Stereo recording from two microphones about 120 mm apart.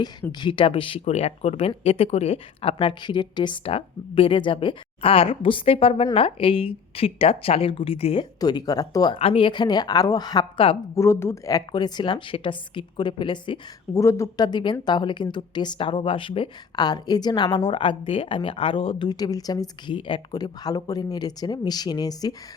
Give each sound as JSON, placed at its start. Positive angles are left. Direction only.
{"t": 0.0, "sound": "speech", "side_deg": 40}
{"t": 1.0, "sound": "speech", "side_deg": 65}
{"t": 8.4, "sound": "a woman's voice", "side_deg": 35}
{"t": 9.1, "sound": "speech", "side_deg": 55}
{"t": 9.5, "sound": "a woman's voice", "side_deg": 40}
{"t": 10.9, "sound": "a woman's voice", "side_deg": 20}
{"t": 13.9, "sound": "speech", "side_deg": 25}
{"t": 14.4, "sound": "a woman's voice", "side_deg": 40}
{"t": 20.0, "sound": "a woman's voice", "side_deg": 45}